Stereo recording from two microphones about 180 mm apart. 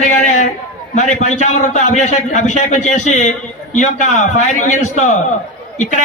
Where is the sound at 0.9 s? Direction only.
40° left (ahead or behind).